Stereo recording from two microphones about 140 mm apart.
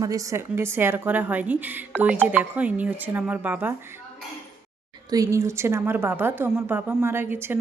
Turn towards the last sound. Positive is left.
turn(degrees=-15)  # may be behind; listen again after turning